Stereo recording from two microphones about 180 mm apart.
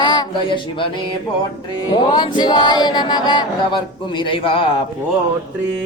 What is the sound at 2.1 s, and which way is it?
Female singing, 25° left (ahead or behind).